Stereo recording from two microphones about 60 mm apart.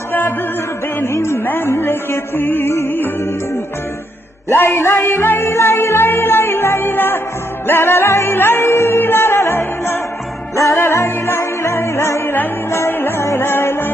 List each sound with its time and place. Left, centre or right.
0.1 s music: left
1.0 s speech: left
1.5 s music: left
4.4 s music: left